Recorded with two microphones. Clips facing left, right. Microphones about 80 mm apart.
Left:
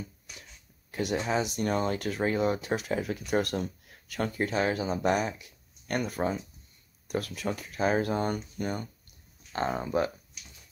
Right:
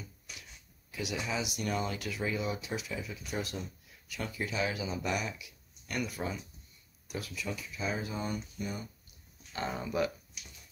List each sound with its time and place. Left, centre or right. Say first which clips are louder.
0.9 s speech: left 7 dB; left
9.5 s speech: left 6 dB; left